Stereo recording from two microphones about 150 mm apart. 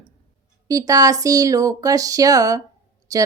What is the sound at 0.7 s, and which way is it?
Speech, 25° right (ahead or behind).